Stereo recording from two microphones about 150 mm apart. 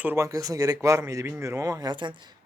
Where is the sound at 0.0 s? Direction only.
15° right (ahead or behind).